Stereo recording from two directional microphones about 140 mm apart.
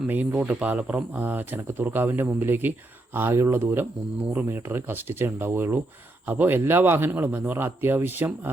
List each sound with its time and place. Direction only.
0.1 s speech: 10° right (ahead or behind)